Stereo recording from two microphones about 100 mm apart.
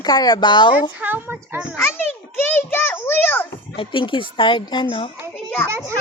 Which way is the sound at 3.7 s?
55° left (ahead or behind).